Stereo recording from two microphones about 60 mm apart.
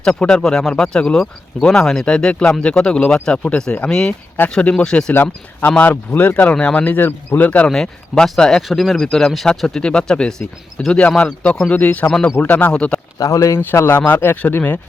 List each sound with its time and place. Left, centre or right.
0.0 s speech: centre
4.4 s speech: left
4.7 s speech: centre
5.2 s speech: left
6.8 s speech: left
7.7 s speech: centre; by 12.7 s left
12.7 s speech: centre
13.1 s speech: left
13.5 s speech: left